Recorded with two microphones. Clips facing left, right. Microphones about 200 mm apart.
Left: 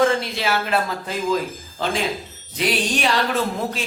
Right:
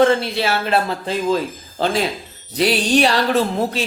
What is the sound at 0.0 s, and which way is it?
Speech, 30° right (ahead or behind).